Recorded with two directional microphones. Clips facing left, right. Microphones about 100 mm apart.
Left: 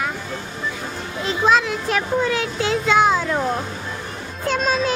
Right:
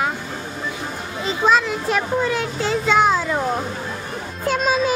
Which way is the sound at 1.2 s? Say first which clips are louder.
Even; centre (ahead or behind).